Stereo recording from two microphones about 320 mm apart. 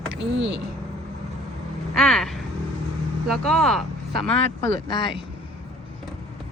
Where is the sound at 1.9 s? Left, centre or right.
Centre.